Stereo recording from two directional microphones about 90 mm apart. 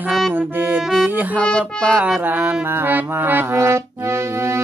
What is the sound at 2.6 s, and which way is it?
Music, 25° right (ahead or behind).